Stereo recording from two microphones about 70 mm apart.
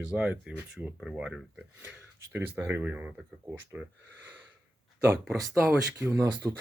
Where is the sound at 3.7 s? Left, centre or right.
Centre.